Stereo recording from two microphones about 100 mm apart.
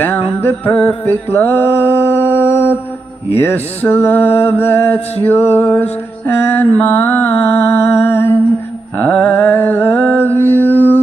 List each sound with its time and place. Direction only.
0.0 s music: 20° left (ahead or behind)
1.1 s mantra: 20° left (ahead or behind)
3.3 s music: 20° left (ahead or behind)
8.9 s mantra: 15° left (ahead or behind)